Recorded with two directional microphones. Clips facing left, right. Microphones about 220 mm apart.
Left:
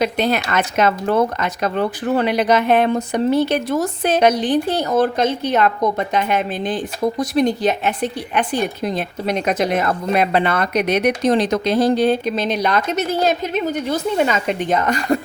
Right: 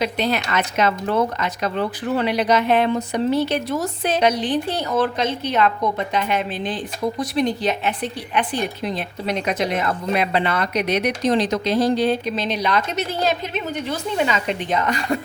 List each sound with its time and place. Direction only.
0.0 s speech: 50° left (ahead or behind)